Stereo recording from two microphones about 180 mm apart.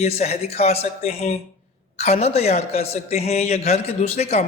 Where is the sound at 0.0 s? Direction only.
40° left (ahead or behind).